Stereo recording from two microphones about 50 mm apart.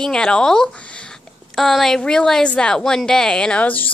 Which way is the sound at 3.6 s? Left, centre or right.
Left.